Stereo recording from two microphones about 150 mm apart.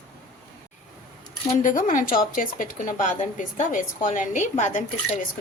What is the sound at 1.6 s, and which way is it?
A woman's voice, 65° left (ahead or behind).